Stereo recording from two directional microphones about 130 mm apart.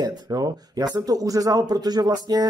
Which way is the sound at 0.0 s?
30° right (ahead or behind).